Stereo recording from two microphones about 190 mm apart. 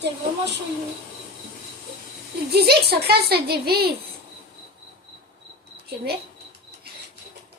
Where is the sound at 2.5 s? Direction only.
55° right (ahead or behind).